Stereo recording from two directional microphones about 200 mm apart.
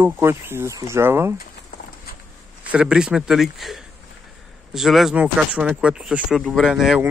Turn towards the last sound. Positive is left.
turn(degrees=0)  # may be behind; listen again after turning